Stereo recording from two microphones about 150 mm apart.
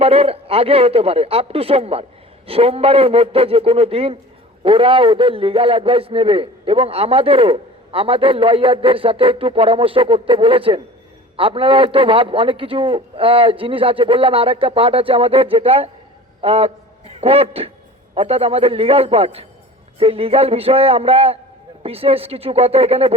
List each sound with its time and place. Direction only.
0.0 s a man's voice: 40° right (ahead or behind)